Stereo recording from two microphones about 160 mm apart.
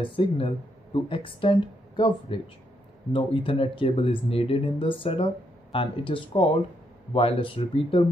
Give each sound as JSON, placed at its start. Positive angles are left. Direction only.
{"t": 0.0, "sound": "speech", "side_deg": 30}